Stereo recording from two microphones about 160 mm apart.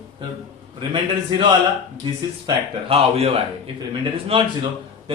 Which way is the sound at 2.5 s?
40° right (ahead or behind).